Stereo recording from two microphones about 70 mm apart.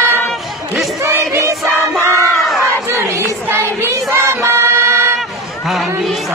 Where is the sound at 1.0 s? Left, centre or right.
Right.